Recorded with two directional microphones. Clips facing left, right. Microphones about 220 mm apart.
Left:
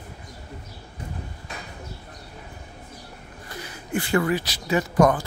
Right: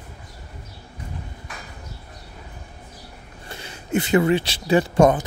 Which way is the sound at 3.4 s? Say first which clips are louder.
Right 4 dB; 25° right (ahead or behind).